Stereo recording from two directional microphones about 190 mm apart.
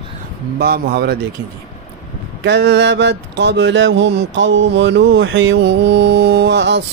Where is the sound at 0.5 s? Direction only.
55° right (ahead or behind).